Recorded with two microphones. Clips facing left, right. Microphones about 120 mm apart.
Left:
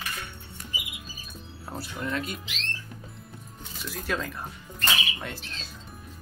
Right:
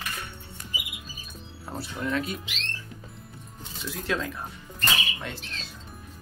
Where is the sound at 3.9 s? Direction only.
Centre (ahead or behind).